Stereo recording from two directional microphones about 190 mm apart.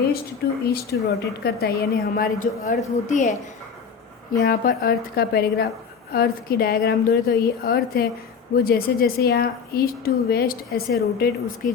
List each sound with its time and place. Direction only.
0.4 s a woman's voice: 65° left (ahead or behind); by 3.3 s 40° left (ahead or behind)
4.4 s a woman's voice: 50° left (ahead or behind)